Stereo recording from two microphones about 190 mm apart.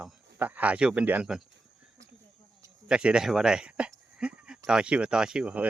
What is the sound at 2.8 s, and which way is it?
Speech, 5° right (ahead or behind).